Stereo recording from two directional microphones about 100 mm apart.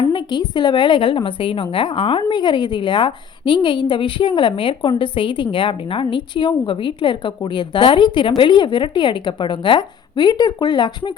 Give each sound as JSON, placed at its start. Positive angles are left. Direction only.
{"t": 0.1, "sound": "a woman's voice", "side_deg": 50}